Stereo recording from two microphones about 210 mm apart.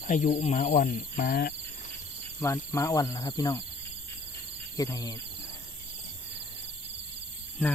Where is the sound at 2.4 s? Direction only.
15° left (ahead or behind).